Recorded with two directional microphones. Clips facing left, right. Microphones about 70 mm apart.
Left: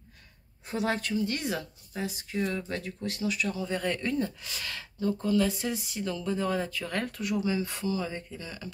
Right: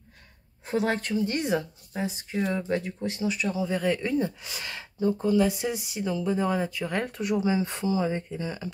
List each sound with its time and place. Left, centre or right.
0.7 s speech: right
1.1 s speech: right
3.6 s speech: centre; by 8.7 s right